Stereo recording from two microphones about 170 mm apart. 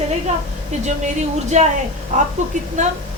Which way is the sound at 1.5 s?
45° right (ahead or behind).